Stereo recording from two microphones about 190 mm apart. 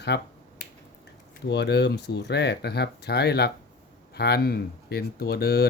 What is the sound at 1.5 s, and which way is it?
Speech, 60° left (ahead or behind).